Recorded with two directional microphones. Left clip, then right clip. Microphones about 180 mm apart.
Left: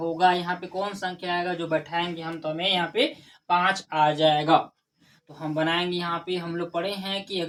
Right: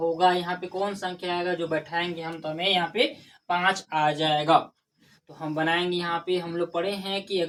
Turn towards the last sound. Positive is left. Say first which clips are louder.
# right 1 dB
turn(degrees=25)  # may be behind; listen again after turning